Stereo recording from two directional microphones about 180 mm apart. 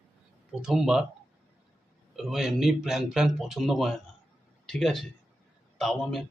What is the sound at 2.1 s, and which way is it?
Speech, centre (ahead or behind).